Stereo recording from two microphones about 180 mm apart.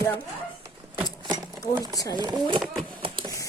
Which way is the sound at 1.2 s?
25° right (ahead or behind).